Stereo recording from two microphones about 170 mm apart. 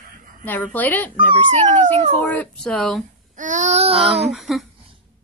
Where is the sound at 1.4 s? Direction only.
45° right (ahead or behind).